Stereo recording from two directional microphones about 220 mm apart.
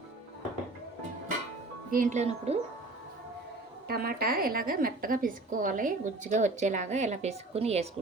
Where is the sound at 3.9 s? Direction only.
45° right (ahead or behind).